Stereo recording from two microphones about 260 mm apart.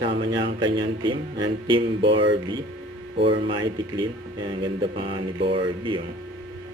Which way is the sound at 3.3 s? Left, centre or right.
Centre.